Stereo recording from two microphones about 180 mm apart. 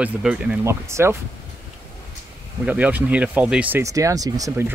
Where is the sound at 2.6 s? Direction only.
10° right (ahead or behind).